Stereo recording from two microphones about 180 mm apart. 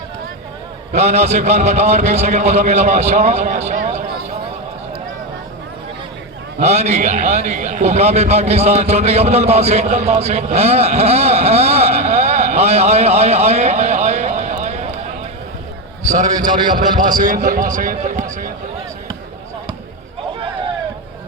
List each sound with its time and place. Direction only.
0.9 s a man's voice: 40° right (ahead or behind)
6.6 s a man's voice: 40° right (ahead or behind)
16.1 s a man's voice: 45° right (ahead or behind)